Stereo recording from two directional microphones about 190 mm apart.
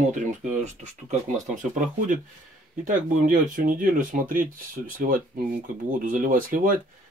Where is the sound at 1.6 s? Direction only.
40° right (ahead or behind).